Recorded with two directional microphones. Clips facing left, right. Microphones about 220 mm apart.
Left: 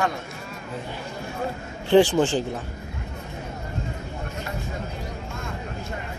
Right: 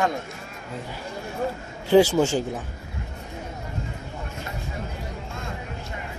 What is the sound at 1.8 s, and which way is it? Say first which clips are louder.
Speech: even; 10° right (ahead or behind).